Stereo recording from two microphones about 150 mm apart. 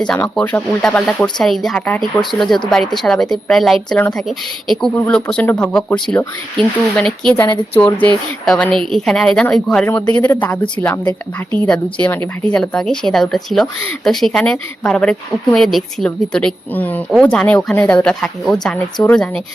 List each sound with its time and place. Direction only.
0.3 s speech: 5° left (ahead or behind)
7.4 s speech: 30° left (ahead or behind)
7.8 s speech: 10° left (ahead or behind)